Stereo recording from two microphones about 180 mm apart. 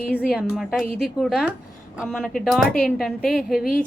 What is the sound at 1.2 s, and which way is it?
A woman's voice, 5° right (ahead or behind).